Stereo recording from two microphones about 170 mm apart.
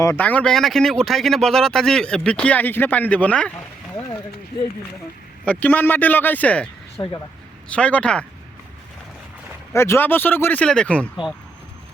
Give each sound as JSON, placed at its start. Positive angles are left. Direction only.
{"t": 0.0, "sound": "speech", "side_deg": 15}
{"t": 5.5, "sound": "speech", "side_deg": 10}
{"t": 7.0, "sound": "speech", "side_deg": 25}
{"t": 7.7, "sound": "speech", "side_deg": 5}
{"t": 9.7, "sound": "speech", "side_deg": 15}